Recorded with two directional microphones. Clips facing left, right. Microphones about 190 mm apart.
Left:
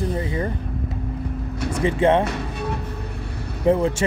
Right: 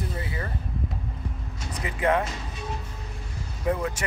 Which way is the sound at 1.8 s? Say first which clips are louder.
Left 7 dB; 30° left (ahead or behind).